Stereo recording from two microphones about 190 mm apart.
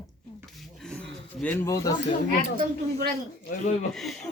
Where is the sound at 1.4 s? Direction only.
10° left (ahead or behind).